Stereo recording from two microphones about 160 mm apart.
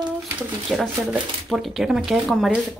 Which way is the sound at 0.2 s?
Centre (ahead or behind).